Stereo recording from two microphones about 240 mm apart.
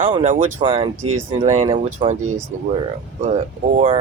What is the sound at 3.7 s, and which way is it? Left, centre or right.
Speech, right.